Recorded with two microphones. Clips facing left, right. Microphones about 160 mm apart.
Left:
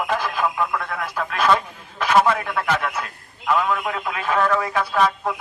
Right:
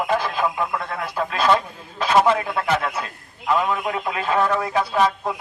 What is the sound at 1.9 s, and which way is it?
A man's voice, 25° right (ahead or behind).